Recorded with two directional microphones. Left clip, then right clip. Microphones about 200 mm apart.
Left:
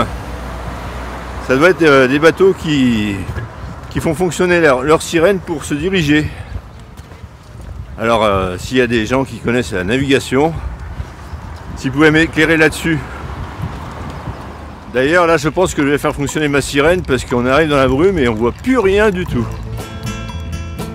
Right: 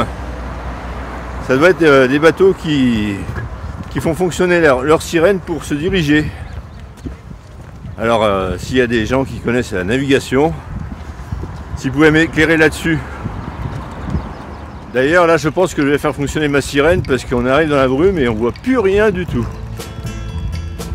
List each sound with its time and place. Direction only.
0.5 s vehicle: 55° left (ahead or behind)
1.5 s speech: 15° left (ahead or behind)
8.0 s speech: 10° left (ahead or behind)
11.8 s speech: 10° left (ahead or behind)
15.0 s speech: 5° left (ahead or behind)